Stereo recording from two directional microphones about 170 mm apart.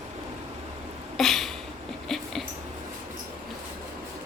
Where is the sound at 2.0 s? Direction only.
Centre (ahead or behind).